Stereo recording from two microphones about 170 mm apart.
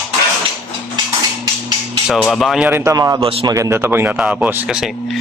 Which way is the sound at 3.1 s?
35° right (ahead or behind).